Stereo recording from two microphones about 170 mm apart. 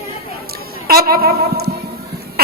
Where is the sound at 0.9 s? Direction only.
60° right (ahead or behind).